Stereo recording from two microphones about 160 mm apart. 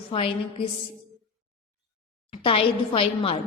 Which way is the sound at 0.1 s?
35° left (ahead or behind).